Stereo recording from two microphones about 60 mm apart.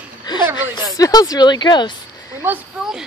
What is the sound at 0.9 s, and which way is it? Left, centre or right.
Speech, left.